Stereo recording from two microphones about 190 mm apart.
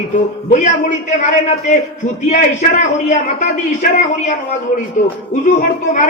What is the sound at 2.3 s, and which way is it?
A man's voice, 40° left (ahead or behind).